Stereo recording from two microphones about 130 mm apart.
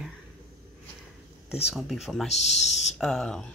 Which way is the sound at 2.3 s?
60° left (ahead or behind).